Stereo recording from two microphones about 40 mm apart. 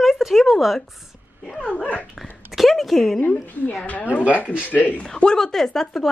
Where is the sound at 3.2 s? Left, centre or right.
Left.